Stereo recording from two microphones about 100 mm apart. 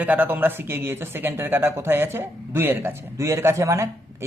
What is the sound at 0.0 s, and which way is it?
Speech, 15° right (ahead or behind).